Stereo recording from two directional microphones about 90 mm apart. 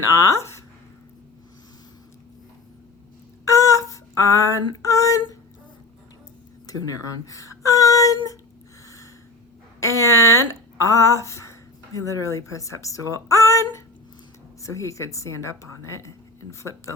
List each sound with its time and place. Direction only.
3.4 s female singing: 35° left (ahead or behind)
6.7 s speech: 40° left (ahead or behind)
9.8 s a woman's voice: 35° left (ahead or behind)